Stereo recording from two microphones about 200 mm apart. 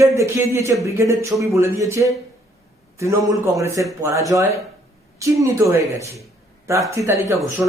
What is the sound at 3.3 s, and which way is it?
Speech, 15° right (ahead or behind).